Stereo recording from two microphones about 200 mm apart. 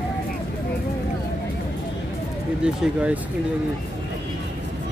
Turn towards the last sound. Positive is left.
turn(degrees=-5)  # may be behind; listen again after turning